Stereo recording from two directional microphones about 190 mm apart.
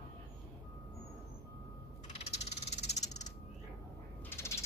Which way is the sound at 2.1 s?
35° left (ahead or behind).